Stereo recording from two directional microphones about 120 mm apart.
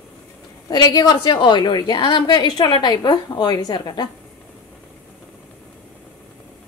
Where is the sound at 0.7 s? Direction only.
35° left (ahead or behind).